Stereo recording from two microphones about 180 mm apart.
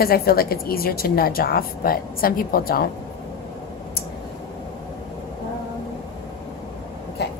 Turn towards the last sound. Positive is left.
turn(degrees=70)  # may be behind; listen again after turning